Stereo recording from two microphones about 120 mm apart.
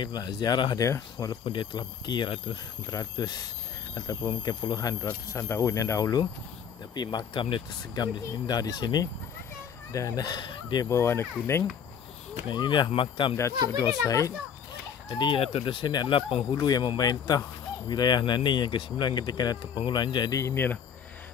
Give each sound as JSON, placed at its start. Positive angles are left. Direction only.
{"t": 0.0, "sound": "speech", "side_deg": 35}
{"t": 0.8, "sound": "speech", "side_deg": 25}
{"t": 1.3, "sound": "speech", "side_deg": 45}
{"t": 2.9, "sound": "speech", "side_deg": 30}
{"t": 5.0, "sound": "speech", "side_deg": 20}
{"t": 7.0, "sound": "speech", "side_deg": 35}
{"t": 10.9, "sound": "speech", "side_deg": 20}
{"t": 12.4, "sound": "speech", "side_deg": 40}
{"t": 14.0, "sound": "speech", "side_deg": 30}
{"t": 15.0, "sound": "speech", "side_deg": 40}
{"t": 16.5, "sound": "speech", "side_deg": 30}